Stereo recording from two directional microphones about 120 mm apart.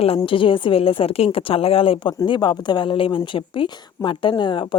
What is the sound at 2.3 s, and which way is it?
A woman's voice, 40° left (ahead or behind).